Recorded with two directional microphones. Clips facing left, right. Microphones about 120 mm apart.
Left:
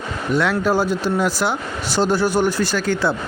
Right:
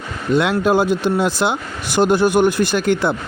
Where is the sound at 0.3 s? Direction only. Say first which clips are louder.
Right 3 dB; 20° right (ahead or behind).